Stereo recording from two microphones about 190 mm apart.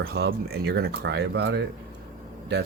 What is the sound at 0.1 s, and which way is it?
Speech, 60° right (ahead or behind).